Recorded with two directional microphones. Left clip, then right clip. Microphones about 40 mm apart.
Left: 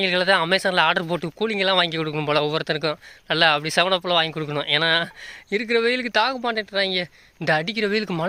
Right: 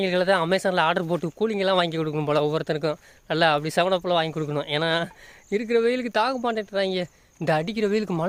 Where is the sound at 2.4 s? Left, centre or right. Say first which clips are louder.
Left 1 dB; right.